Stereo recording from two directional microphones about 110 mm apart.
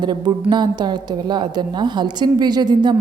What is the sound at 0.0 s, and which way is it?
A woman's voice, 40° right (ahead or behind).